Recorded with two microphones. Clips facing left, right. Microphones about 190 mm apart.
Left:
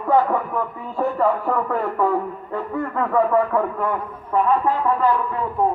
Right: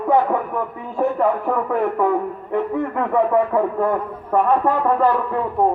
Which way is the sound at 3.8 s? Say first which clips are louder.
Right 4 dB; 60° right (ahead or behind).